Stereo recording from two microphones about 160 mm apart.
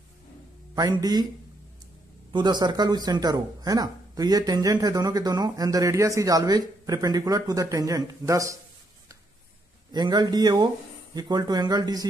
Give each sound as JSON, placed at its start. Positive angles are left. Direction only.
{"t": 0.7, "sound": "speech", "side_deg": -25}
{"t": 2.3, "sound": "speech", "side_deg": -25}
{"t": 9.9, "sound": "speech", "side_deg": -25}